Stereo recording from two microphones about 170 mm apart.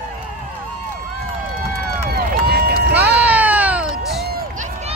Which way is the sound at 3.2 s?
10° right (ahead or behind).